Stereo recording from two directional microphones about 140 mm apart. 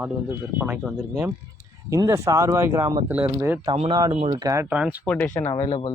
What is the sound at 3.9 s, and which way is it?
Speech, 30° right (ahead or behind).